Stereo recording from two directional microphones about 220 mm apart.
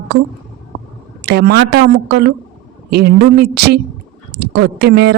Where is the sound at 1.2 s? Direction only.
50° right (ahead or behind).